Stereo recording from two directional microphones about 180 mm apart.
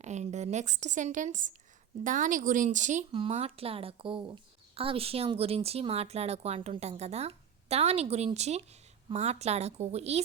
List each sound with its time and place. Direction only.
0.0 s a woman's voice: 40° right (ahead or behind)
3.1 s a woman's voice: 30° right (ahead or behind)